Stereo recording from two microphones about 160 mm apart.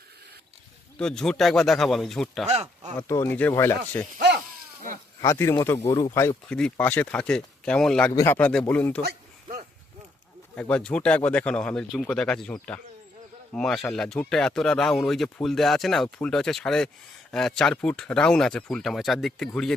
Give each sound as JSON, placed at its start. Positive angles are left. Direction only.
{"t": 0.9, "sound": "speech", "side_deg": 5}
{"t": 2.5, "sound": "speech", "side_deg": -40}
{"t": 2.9, "sound": "speech", "side_deg": 15}
{"t": 5.2, "sound": "speech", "side_deg": 20}
{"t": 6.5, "sound": "speech", "side_deg": 5}
{"t": 8.1, "sound": "speech", "side_deg": 20}
{"t": 9.0, "sound": "a sound", "side_deg": -70}
{"t": 10.5, "sound": "speech", "side_deg": 10}